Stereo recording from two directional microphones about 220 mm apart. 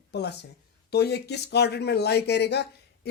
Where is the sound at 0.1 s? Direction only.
50° left (ahead or behind).